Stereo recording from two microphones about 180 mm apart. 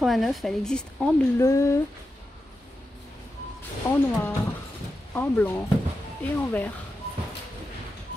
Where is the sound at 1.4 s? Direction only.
15° left (ahead or behind).